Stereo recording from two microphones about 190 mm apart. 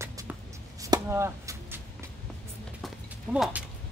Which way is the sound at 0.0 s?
15° right (ahead or behind).